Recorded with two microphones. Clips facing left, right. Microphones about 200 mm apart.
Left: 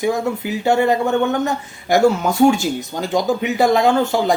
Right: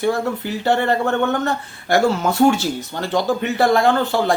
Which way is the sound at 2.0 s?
Centre (ahead or behind).